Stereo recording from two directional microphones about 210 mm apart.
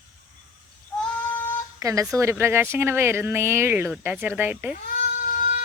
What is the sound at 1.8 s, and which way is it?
Speech, 15° right (ahead or behind).